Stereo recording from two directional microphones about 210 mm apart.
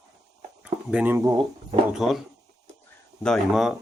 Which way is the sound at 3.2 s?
Centre (ahead or behind).